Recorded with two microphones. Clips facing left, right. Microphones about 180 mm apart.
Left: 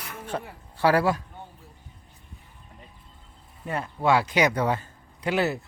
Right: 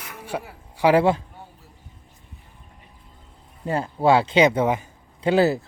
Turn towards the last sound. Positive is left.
turn(degrees=-30)  # may be behind; listen again after turning